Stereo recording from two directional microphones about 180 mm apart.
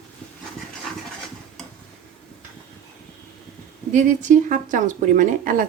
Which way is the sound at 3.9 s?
45° right (ahead or behind).